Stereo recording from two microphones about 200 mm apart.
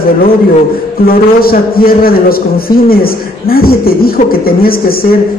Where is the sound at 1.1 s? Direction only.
50° left (ahead or behind).